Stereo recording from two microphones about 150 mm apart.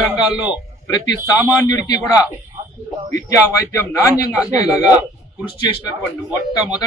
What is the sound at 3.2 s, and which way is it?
A man's voice, 20° left (ahead or behind).